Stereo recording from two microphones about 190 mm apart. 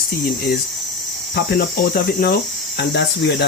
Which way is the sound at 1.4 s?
50° left (ahead or behind).